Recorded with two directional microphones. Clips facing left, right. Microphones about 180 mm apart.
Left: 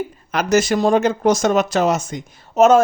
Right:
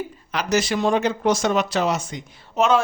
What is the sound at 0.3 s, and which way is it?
Speech, 50° left (ahead or behind).